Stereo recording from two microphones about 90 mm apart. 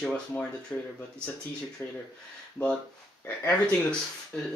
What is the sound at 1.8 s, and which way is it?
Speech, 25° left (ahead or behind).